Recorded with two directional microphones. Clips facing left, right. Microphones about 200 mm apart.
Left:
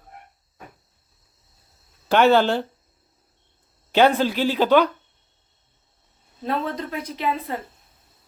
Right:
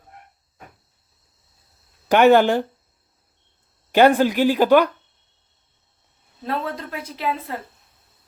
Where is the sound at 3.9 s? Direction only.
10° right (ahead or behind).